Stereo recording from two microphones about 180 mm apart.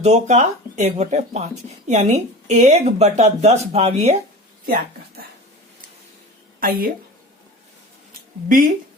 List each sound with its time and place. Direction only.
0.0 s speech: 35° right (ahead or behind)
4.6 s speech: 55° right (ahead or behind)
6.6 s speech: 55° right (ahead or behind)
8.4 s speech: 50° right (ahead or behind)